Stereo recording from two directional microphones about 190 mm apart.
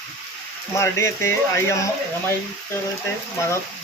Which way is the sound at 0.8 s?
15° left (ahead or behind).